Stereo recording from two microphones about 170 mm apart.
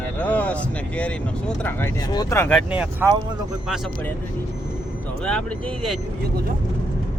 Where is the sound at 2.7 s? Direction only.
10° right (ahead or behind).